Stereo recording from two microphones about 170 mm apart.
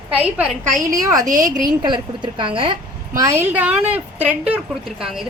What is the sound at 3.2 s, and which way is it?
A woman's voice, 15° right (ahead or behind).